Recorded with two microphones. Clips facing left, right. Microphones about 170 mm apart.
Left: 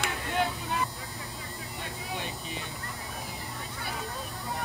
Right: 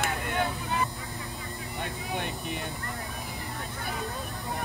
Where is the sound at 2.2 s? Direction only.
60° right (ahead or behind).